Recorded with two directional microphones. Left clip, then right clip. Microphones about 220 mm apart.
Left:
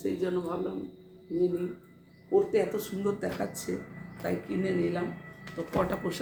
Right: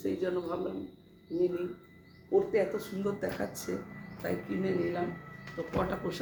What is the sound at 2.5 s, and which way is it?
A man's voice, 10° left (ahead or behind).